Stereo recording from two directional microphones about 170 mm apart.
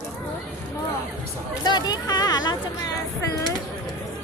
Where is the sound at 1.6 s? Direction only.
25° left (ahead or behind).